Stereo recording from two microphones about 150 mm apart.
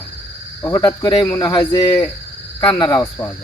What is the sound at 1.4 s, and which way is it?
Speech, 30° left (ahead or behind).